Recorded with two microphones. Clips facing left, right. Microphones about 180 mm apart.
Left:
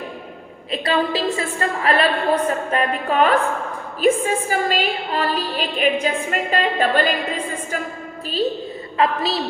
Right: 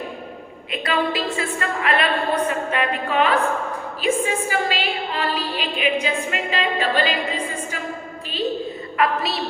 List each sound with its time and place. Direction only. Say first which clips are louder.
0.7 s a woman's voice: left 2 dB; 35° left (ahead or behind); by 7.1 s 50° left (ahead or behind)
9.0 s a woman's voice: left 2 dB; 30° left (ahead or behind)